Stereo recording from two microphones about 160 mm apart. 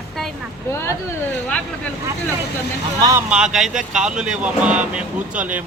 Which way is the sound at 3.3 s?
5° right (ahead or behind).